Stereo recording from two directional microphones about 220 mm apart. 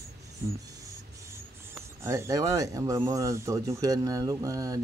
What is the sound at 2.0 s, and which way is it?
Speech, 10° right (ahead or behind).